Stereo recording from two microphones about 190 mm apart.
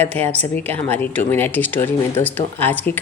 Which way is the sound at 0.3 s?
10° left (ahead or behind).